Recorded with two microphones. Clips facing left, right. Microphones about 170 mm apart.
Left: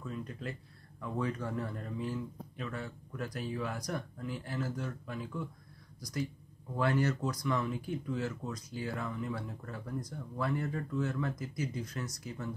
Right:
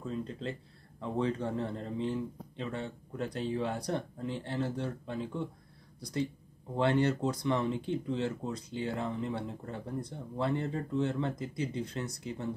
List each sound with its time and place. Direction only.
0.0 s a sound: 30° right (ahead or behind)
1.0 s speech: 25° right (ahead or behind)
6.7 s speech: 25° right (ahead or behind)